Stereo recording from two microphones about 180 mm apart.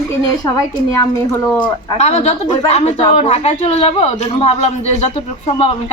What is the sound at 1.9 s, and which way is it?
A woman's voice, 35° left (ahead or behind).